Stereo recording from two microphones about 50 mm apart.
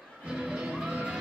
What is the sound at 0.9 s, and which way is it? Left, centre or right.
Music, right.